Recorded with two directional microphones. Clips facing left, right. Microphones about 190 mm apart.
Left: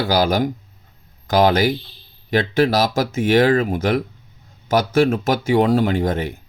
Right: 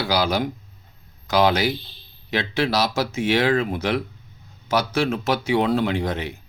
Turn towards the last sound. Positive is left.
turn(degrees=45)  # may be behind; listen again after turning